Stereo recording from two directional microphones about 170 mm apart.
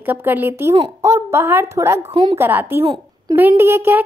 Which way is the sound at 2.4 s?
10° right (ahead or behind).